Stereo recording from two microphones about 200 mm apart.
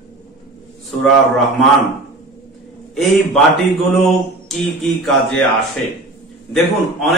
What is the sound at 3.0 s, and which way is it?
Speech, centre (ahead or behind).